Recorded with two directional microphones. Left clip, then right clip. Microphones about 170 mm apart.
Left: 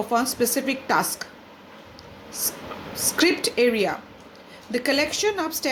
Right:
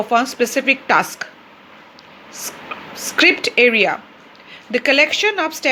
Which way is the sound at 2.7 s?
15° right (ahead or behind).